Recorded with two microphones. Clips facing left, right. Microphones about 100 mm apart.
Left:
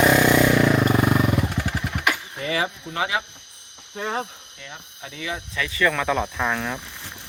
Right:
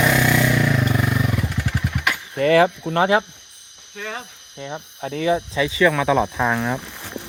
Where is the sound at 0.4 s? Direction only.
30° left (ahead or behind).